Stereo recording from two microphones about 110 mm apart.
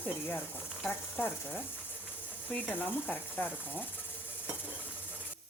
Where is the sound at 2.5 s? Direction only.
15° left (ahead or behind).